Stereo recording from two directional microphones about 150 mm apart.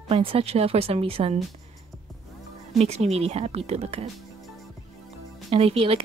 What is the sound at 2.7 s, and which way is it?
Speech, 45° right (ahead or behind).